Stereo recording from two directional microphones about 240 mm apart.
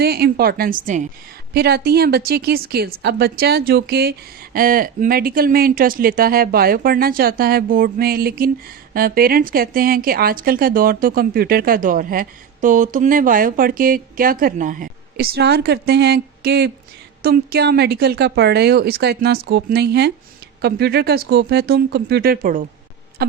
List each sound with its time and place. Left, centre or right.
0.0 s a woman's voice: right